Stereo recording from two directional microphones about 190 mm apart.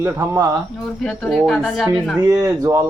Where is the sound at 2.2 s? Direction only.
15° right (ahead or behind).